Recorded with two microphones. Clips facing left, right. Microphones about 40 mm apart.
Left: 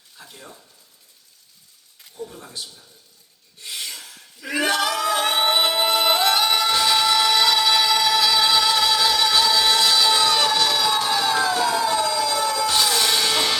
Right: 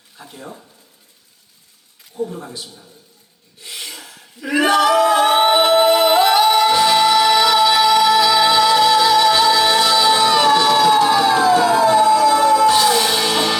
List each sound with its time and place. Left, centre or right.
0.2 s a man's voice: right
2.1 s a man's voice: right
3.6 s a sound: centre
5.1 s music: right